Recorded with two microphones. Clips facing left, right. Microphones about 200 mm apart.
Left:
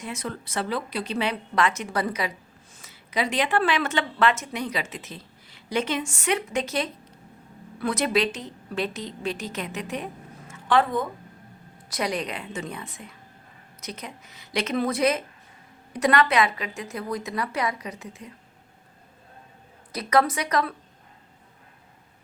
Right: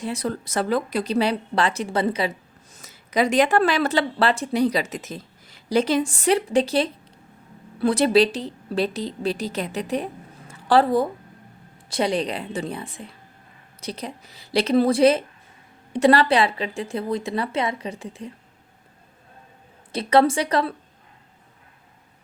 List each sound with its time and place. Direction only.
0.0 s speech: 35° right (ahead or behind)
2.7 s a woman's voice: 40° right (ahead or behind)
19.9 s a woman's voice: 30° right (ahead or behind)